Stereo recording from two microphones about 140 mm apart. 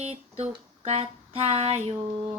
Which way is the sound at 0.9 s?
50° right (ahead or behind).